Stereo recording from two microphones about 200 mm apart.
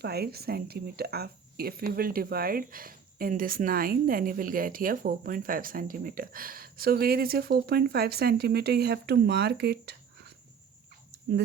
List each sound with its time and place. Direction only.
0.0 s speech: 50° right (ahead or behind)